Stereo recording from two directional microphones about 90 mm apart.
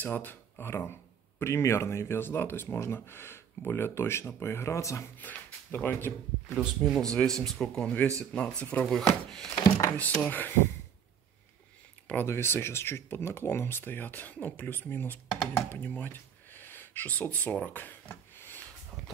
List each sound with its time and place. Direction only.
0.0 s speech: 20° left (ahead or behind)
5.2 s speech: 20° left (ahead or behind)
6.5 s speech: centre (ahead or behind)
9.9 s speech: 15° left (ahead or behind)
12.3 s speech: 25° left (ahead or behind)